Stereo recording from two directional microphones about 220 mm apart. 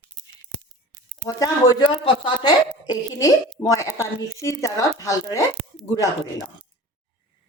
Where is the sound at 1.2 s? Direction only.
15° left (ahead or behind).